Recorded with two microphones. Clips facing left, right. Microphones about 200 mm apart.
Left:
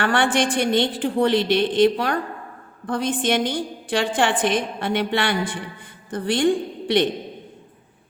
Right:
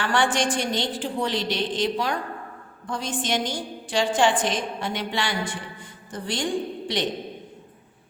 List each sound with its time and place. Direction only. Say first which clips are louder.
0.0 s a woman's voice: left 3 dB; 60° left (ahead or behind)